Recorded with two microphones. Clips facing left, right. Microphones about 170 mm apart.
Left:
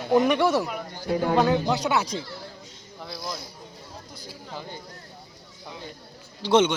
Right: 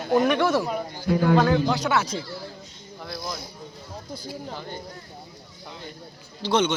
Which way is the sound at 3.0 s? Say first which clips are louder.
Right 1 dB; centre (ahead or behind).